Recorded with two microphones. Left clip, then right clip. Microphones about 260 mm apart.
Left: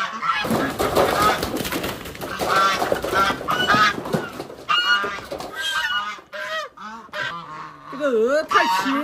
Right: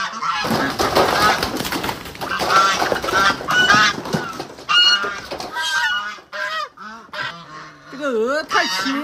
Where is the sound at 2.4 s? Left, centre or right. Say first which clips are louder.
Right 3 dB; right.